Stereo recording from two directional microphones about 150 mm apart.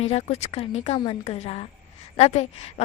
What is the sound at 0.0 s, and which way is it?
Speech, 45° left (ahead or behind).